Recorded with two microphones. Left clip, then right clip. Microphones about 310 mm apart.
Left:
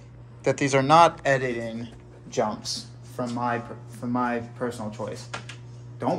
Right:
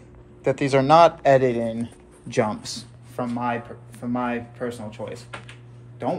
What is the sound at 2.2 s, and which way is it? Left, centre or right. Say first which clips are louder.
Speech: right 3 dB; right.